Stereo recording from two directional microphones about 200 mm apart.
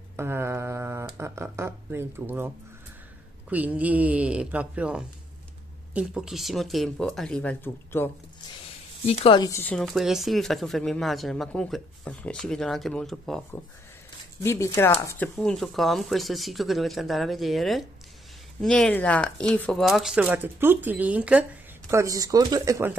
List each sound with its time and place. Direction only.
0.1 s speech: 10° right (ahead or behind); by 8.1 s 10° left (ahead or behind)
9.0 s speech: 30° left (ahead or behind); by 13.5 s centre (ahead or behind)
14.4 s speech: 15° left (ahead or behind); by 21.5 s 5° right (ahead or behind)
21.9 s speech: 15° right (ahead or behind)